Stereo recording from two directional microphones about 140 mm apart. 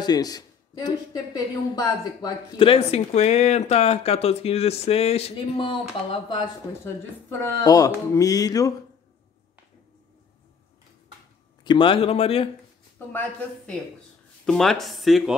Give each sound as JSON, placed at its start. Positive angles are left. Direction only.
{"t": 0.0, "sound": "speech", "side_deg": 30}
{"t": 6.8, "sound": "speech", "side_deg": 20}
{"t": 11.6, "sound": "speech", "side_deg": 35}
{"t": 13.1, "sound": "speech", "side_deg": 10}